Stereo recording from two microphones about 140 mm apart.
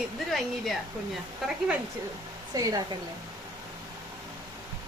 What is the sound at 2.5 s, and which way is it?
Speech, 25° right (ahead or behind).